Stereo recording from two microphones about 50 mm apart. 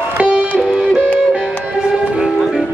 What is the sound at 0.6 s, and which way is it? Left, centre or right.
Music, centre.